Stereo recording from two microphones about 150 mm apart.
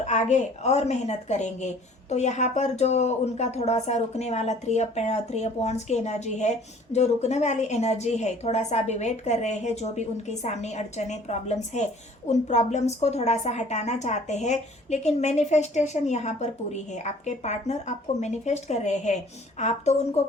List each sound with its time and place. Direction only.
0.0 s speech: 50° left (ahead or behind)